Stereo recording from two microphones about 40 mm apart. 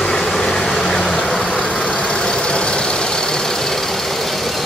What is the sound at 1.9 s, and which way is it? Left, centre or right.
Vehicle, left.